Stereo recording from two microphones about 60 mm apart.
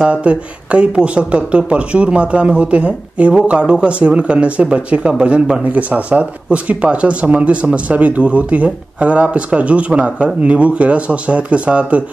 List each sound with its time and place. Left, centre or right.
0.0 s speech: centre